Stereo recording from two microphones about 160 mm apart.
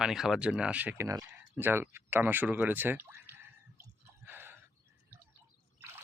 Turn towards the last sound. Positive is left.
turn(degrees=-15)  # may be behind; listen again after turning